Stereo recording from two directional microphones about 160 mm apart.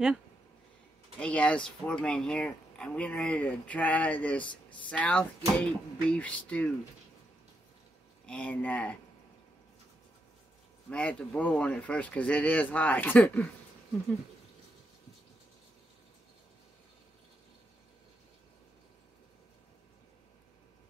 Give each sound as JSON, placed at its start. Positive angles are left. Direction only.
{"t": 1.2, "sound": "speech", "side_deg": 5}
{"t": 4.4, "sound": "speech", "side_deg": 30}
{"t": 4.8, "sound": "speech", "side_deg": 10}
{"t": 8.3, "sound": "speech", "side_deg": 10}
{"t": 10.9, "sound": "speech", "side_deg": 5}